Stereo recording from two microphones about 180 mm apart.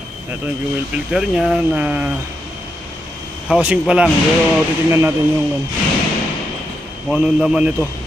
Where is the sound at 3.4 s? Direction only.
5° right (ahead or behind).